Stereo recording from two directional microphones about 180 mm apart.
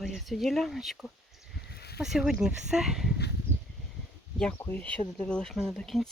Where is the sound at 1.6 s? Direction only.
65° left (ahead or behind).